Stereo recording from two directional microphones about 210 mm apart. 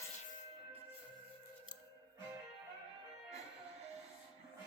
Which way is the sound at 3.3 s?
30° right (ahead or behind).